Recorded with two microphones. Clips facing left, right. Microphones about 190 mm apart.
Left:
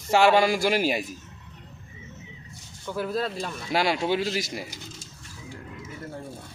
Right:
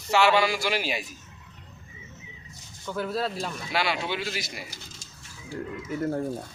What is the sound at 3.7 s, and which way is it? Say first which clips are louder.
Speech: left 5 dB; 45° left (ahead or behind).